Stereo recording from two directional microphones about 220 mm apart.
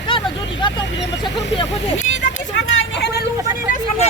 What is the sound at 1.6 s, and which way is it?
Speech, 30° left (ahead or behind).